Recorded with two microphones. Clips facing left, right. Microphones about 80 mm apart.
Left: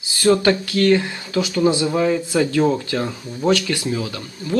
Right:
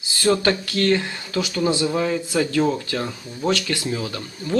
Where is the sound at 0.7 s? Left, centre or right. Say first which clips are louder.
Left 4 dB; centre.